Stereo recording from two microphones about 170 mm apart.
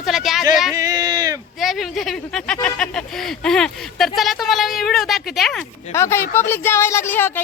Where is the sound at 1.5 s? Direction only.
Centre (ahead or behind).